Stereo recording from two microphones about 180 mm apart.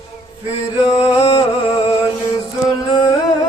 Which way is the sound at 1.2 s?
30° left (ahead or behind).